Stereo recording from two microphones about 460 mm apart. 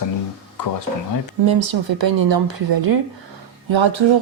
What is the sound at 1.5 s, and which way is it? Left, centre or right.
Speech, right.